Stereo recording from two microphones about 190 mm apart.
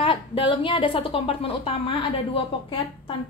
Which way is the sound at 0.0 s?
25° left (ahead or behind).